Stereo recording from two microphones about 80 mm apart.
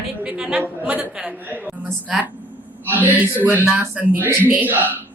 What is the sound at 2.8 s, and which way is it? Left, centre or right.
A woman's voice, right.